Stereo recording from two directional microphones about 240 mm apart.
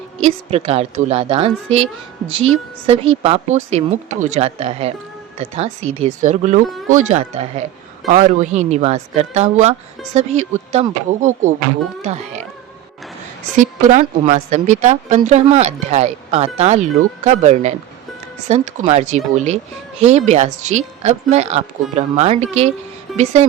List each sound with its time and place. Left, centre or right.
0.2 s a woman's voice: right
13.6 s a woman's voice: right